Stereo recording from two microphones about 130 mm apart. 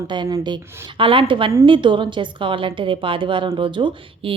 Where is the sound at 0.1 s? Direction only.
35° right (ahead or behind).